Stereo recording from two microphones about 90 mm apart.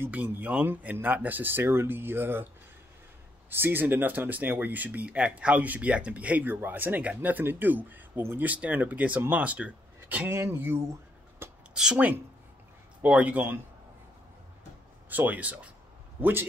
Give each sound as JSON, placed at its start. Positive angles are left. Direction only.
{"t": 0.0, "sound": "speech", "side_deg": -20}
{"t": 3.4, "sound": "speech", "side_deg": -25}
{"t": 11.7, "sound": "a woman's voice", "side_deg": -10}
{"t": 13.0, "sound": "speech", "side_deg": -15}
{"t": 15.0, "sound": "speech", "side_deg": -20}